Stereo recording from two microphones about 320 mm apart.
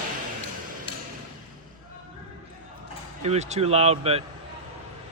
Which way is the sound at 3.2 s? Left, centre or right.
Right.